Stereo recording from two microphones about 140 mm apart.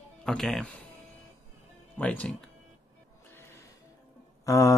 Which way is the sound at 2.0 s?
10° left (ahead or behind).